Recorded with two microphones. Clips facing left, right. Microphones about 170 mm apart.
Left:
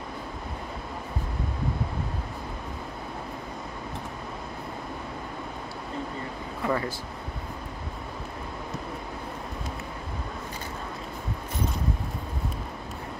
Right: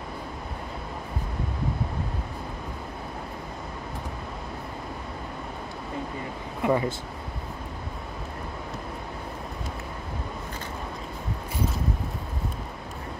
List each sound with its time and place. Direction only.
6.6 s speech: 15° right (ahead or behind)